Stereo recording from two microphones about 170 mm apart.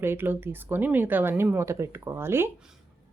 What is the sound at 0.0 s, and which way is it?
Speech, 15° right (ahead or behind).